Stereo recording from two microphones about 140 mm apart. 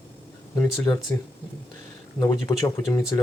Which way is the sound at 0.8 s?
25° left (ahead or behind).